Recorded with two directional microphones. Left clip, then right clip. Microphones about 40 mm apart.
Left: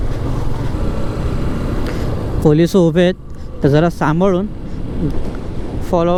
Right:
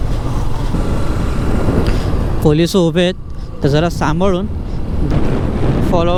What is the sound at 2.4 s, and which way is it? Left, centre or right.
Speech, centre.